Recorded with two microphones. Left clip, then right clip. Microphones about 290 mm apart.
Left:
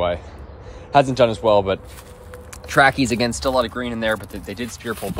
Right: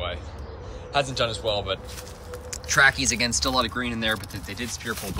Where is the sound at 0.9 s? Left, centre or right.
Centre.